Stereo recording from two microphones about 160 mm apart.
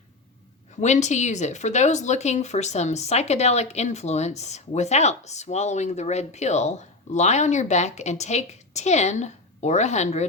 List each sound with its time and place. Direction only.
0.8 s speech: 45° left (ahead or behind)